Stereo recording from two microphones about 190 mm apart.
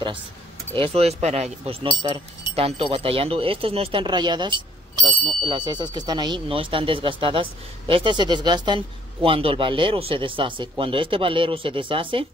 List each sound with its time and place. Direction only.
0.7 s speech: 30° right (ahead or behind)